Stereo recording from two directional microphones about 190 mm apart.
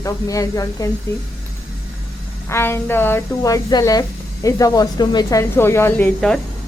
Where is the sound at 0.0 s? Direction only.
15° left (ahead or behind).